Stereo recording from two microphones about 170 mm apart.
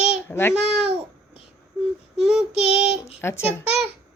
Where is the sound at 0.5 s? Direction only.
5° right (ahead or behind).